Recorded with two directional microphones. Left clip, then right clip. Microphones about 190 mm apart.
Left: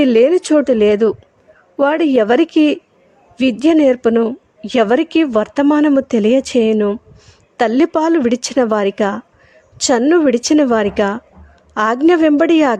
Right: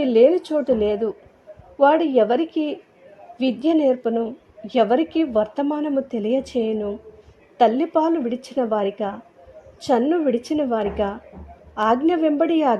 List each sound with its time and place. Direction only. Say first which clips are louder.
0.0 s a woman's voice: left 4 dB; 40° left (ahead or behind)